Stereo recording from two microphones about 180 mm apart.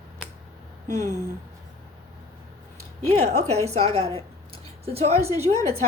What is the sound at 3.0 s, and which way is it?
A woman's voice, 35° right (ahead or behind).